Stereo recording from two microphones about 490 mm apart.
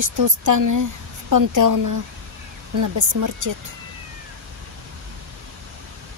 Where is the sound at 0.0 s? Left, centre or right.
Right.